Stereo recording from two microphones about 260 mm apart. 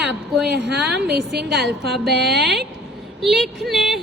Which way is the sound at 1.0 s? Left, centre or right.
Centre.